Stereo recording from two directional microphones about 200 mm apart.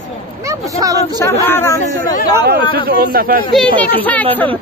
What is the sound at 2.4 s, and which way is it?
Speech, 50° right (ahead or behind).